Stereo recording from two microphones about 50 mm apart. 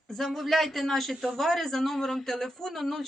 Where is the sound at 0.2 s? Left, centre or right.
Centre.